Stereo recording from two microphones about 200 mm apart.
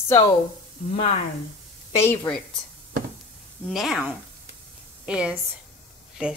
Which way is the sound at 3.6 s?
Centre (ahead or behind).